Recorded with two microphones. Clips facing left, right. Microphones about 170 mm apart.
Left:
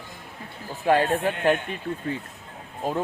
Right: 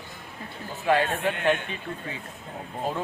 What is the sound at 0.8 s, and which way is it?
Speech, 40° left (ahead or behind).